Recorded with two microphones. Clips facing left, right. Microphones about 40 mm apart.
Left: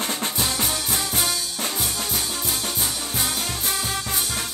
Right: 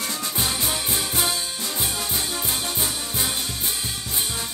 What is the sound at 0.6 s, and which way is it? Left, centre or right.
Music, right.